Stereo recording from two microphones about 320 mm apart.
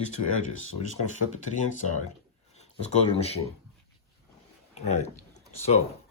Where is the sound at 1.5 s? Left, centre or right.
Left.